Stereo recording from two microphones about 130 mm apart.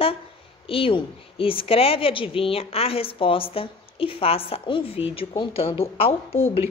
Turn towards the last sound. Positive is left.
turn(degrees=45)  # may be behind; listen again after turning